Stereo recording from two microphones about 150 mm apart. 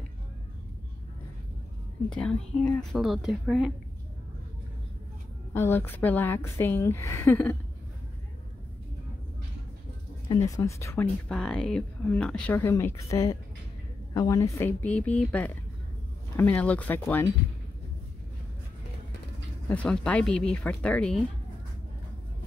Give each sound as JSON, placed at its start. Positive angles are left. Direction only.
{"t": 2.0, "sound": "a woman's voice", "side_deg": 5}
{"t": 5.5, "sound": "speech", "side_deg": 15}
{"t": 10.2, "sound": "speech", "side_deg": 25}
{"t": 11.2, "sound": "speech", "side_deg": 5}
{"t": 19.7, "sound": "speech", "side_deg": 5}